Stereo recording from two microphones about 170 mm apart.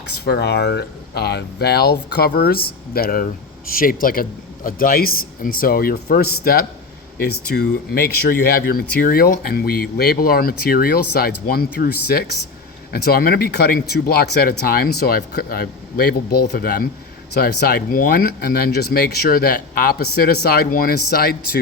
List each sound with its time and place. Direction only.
0.1 s speech: 75° left (ahead or behind)